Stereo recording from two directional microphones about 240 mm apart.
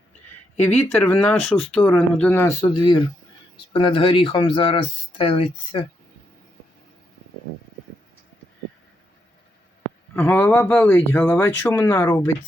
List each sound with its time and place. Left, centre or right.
0.5 s speech: centre; by 5.8 s left
10.2 s speech: centre